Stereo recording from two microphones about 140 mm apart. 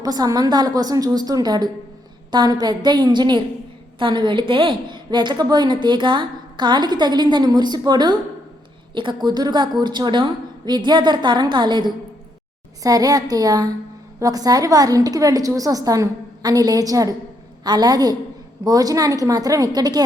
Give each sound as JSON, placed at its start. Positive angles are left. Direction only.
{"t": 0.0, "sound": "a woman's voice", "side_deg": -25}